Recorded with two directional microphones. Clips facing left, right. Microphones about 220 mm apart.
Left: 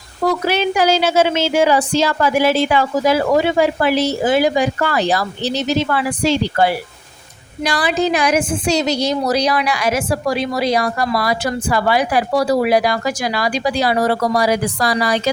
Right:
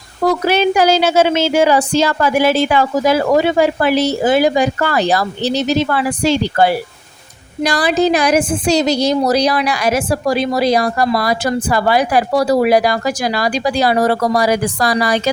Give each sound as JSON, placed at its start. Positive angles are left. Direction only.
{"t": 0.4, "sound": "a woman's voice", "side_deg": -45}